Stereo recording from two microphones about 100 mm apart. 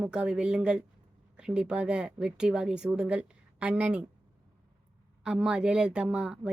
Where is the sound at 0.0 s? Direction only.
10° right (ahead or behind).